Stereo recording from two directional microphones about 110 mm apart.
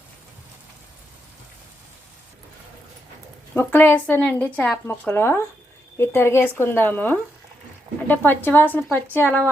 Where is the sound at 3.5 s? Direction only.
20° left (ahead or behind).